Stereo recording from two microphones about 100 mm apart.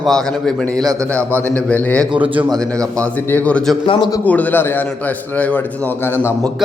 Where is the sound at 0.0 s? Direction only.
5° left (ahead or behind).